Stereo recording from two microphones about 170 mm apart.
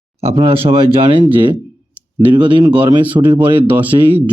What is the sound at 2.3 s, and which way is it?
Speech, 30° right (ahead or behind).